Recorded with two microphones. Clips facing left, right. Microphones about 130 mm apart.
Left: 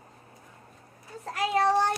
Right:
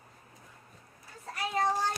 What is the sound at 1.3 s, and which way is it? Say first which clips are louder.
Child singing: left 6 dB; 70° left (ahead or behind).